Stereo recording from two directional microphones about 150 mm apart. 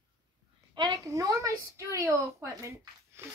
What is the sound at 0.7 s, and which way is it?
Speech, 25° right (ahead or behind).